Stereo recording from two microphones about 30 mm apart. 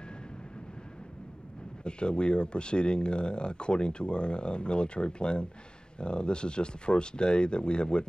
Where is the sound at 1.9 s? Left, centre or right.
Left.